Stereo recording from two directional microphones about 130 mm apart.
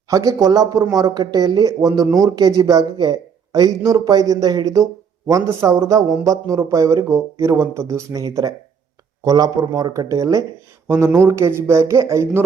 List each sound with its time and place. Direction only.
0.1 s speech: 25° right (ahead or behind)